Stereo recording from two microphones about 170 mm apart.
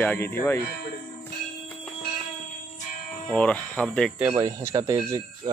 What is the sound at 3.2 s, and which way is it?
Speech, 5° left (ahead or behind).